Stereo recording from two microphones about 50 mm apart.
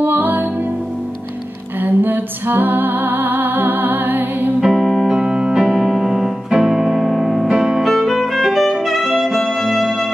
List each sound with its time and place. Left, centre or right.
0.0 s music: right
1.8 s music: right
4.6 s music: centre
4.8 s music: centre
5.1 s music: centre
7.8 s music: centre
8.8 s saxophone: centre